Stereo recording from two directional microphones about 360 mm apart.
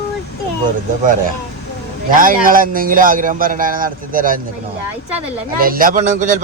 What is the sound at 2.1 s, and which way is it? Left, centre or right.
A man's voice, right.